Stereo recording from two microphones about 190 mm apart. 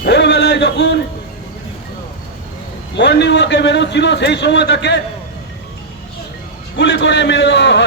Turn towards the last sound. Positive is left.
turn(degrees=65)  # may be behind; listen again after turning